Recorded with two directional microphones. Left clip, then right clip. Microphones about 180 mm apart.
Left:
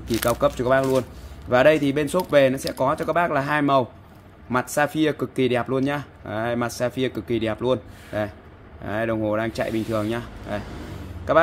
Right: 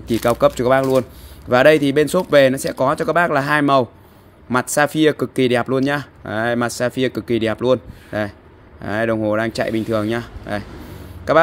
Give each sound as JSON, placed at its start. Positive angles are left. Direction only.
{"t": 0.2, "sound": "speech", "side_deg": -50}